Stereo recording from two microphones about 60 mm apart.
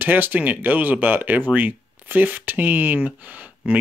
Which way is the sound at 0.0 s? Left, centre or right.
Right.